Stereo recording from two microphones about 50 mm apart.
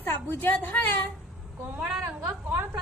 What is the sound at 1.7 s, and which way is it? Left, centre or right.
Speech, right.